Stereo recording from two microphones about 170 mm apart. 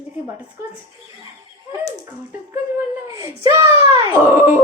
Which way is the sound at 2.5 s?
10° right (ahead or behind).